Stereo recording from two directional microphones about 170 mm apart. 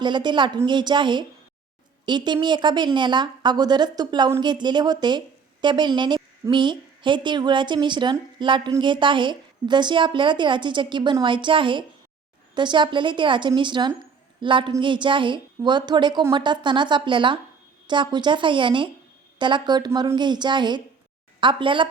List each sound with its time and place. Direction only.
0.0 s a woman's voice: 25° right (ahead or behind)